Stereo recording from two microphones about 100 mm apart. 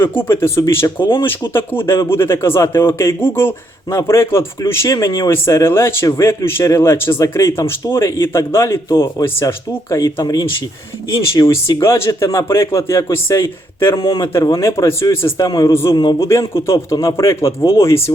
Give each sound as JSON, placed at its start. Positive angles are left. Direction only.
{"t": 0.2, "sound": "a man's voice", "side_deg": 25}
{"t": 0.9, "sound": "speech", "side_deg": 55}
{"t": 1.2, "sound": "a man's voice", "side_deg": 20}
{"t": 11.8, "sound": "a man's voice", "side_deg": 25}
{"t": 14.0, "sound": "speech", "side_deg": 50}
{"t": 14.4, "sound": "a man's voice", "side_deg": 30}
{"t": 15.7, "sound": "a man's voice", "side_deg": 25}